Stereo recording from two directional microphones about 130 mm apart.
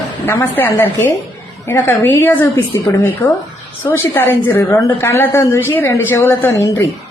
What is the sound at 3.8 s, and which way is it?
A woman's voice, 15° left (ahead or behind).